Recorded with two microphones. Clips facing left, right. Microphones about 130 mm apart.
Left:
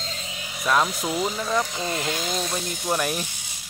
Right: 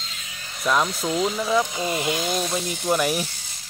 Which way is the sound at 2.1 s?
5° right (ahead or behind).